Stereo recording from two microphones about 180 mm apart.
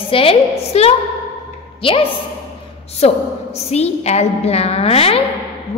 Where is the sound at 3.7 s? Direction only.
35° left (ahead or behind).